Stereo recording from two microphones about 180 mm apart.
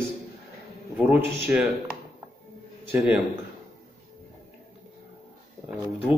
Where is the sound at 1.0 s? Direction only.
5° right (ahead or behind).